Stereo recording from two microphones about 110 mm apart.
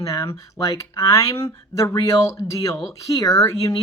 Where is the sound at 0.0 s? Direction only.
30° left (ahead or behind).